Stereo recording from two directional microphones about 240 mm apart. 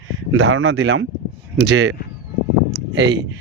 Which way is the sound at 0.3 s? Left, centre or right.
Right.